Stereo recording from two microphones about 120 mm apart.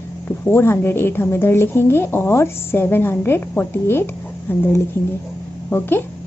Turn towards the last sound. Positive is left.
turn(degrees=15)  # may be behind; listen again after turning